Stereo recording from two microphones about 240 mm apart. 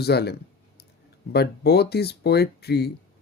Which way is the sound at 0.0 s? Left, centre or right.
Left.